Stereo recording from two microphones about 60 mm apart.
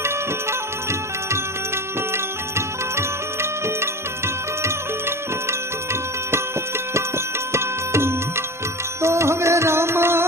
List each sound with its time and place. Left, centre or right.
0.9 s music: right
4.6 s music: right
7.5 s music: right